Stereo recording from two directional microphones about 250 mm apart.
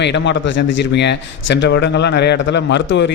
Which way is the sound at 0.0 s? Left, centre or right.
Left.